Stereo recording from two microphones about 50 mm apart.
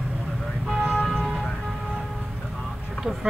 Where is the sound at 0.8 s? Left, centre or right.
Right.